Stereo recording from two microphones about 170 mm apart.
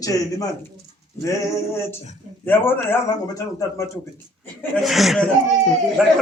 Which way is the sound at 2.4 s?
10° left (ahead or behind).